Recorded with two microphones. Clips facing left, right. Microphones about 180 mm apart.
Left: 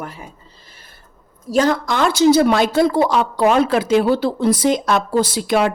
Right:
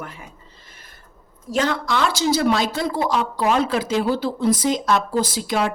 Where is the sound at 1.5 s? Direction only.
40° left (ahead or behind).